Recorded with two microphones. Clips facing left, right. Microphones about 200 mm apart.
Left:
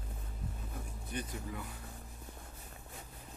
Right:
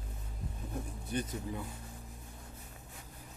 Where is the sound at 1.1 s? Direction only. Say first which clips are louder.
Right 4 dB; 25° right (ahead or behind).